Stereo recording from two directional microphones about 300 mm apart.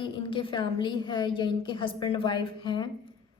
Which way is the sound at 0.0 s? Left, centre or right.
Centre.